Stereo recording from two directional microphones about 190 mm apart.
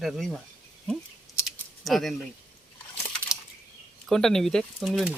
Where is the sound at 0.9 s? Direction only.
Centre (ahead or behind).